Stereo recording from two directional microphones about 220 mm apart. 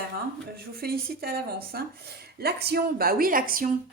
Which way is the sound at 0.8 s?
45° right (ahead or behind).